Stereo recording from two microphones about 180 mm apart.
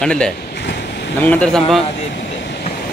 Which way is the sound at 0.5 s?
70° left (ahead or behind).